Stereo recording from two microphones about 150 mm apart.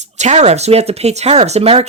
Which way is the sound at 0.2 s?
50° right (ahead or behind).